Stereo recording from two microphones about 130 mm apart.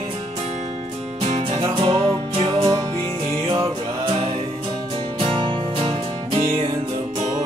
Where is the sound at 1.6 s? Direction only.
40° right (ahead or behind).